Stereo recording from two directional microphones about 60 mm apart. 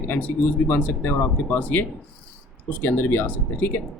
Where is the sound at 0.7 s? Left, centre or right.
Left.